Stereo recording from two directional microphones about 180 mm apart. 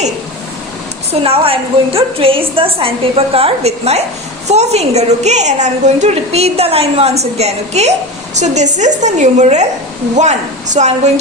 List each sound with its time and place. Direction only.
1.2 s a woman's voice: 30° right (ahead or behind)